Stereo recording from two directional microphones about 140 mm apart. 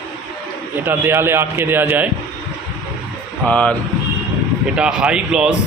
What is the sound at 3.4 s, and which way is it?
Speech, 10° left (ahead or behind).